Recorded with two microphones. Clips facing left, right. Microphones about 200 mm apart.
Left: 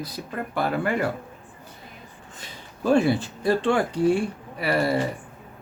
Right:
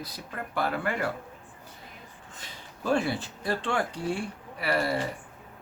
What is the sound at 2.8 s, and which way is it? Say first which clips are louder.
Speech: left 7 dB; 20° left (ahead or behind).